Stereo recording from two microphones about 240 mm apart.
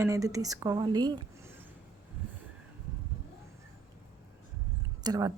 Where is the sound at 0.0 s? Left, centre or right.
Centre.